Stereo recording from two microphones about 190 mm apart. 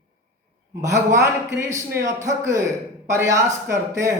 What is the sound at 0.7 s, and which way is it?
A man's voice, 15° right (ahead or behind).